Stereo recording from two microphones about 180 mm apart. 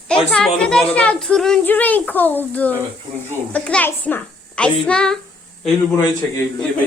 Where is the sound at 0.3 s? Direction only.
5° left (ahead or behind).